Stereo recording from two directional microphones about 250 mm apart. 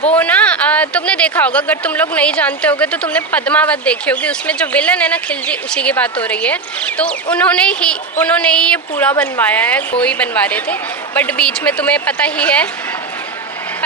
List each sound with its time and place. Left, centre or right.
0.1 s speech: centre